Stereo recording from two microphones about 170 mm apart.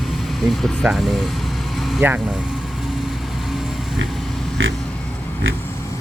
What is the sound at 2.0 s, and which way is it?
Speech, 10° right (ahead or behind).